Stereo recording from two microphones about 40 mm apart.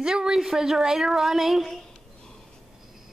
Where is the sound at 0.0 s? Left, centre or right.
Centre.